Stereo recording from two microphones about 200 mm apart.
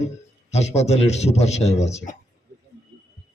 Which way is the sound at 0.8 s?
35° left (ahead or behind).